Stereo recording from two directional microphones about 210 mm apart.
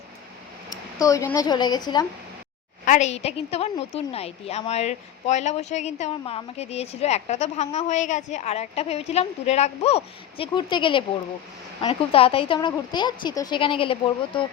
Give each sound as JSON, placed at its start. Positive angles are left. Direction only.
{"t": 0.7, "sound": "speech", "side_deg": 15}
{"t": 2.8, "sound": "a woman's voice", "side_deg": 35}